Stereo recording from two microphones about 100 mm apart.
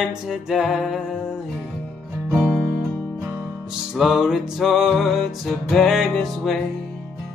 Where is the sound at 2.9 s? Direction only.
15° left (ahead or behind).